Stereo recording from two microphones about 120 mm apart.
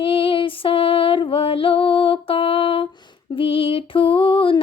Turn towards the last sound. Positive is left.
turn(degrees=45)  # may be behind; listen again after turning